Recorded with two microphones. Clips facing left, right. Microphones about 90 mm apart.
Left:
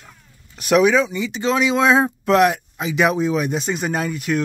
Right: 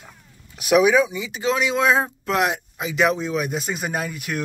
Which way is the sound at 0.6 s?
10° right (ahead or behind).